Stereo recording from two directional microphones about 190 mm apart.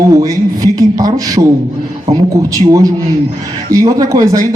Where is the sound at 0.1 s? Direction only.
20° right (ahead or behind).